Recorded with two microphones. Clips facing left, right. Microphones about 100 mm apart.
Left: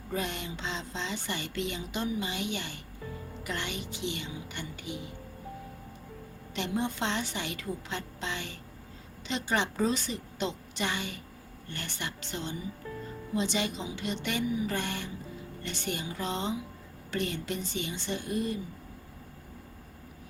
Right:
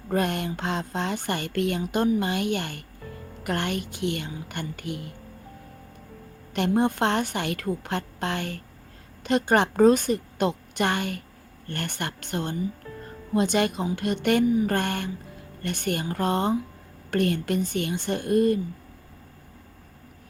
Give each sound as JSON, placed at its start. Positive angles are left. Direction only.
{"t": 0.1, "sound": "speech", "side_deg": -55}
{"t": 6.5, "sound": "speech", "side_deg": -55}